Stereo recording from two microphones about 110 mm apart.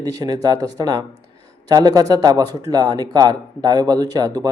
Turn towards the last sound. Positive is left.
turn(degrees=-35)  # may be behind; listen again after turning